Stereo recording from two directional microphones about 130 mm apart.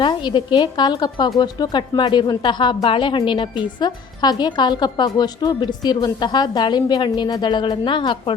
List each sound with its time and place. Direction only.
0.0 s speech: 35° left (ahead or behind)